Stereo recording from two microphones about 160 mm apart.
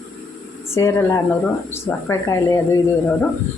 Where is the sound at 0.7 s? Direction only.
15° left (ahead or behind).